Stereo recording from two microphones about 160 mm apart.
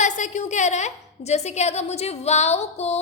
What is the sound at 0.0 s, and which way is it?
A woman's voice, 50° left (ahead or behind).